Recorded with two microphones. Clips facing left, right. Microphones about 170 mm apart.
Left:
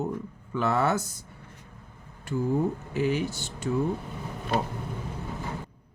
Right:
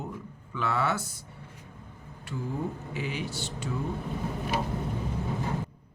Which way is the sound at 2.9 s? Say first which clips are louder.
Left 7 dB; 45° left (ahead or behind).